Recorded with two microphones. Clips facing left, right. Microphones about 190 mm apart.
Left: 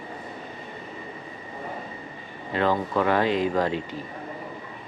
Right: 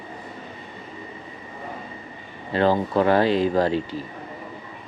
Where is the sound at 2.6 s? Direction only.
30° right (ahead or behind).